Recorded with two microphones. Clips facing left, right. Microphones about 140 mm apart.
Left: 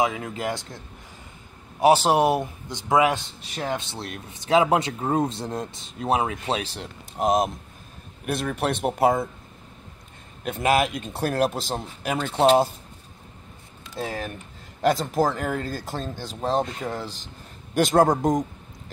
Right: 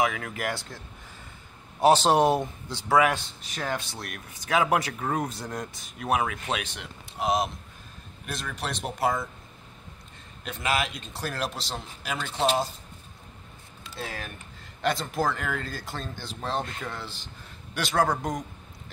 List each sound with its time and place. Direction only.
0.0 s speech: 25° left (ahead or behind)
1.8 s a man's voice: 10° left (ahead or behind); by 9.3 s 50° left (ahead or behind)
10.4 s a man's voice: 50° left (ahead or behind)
13.9 s a man's voice: 40° left (ahead or behind)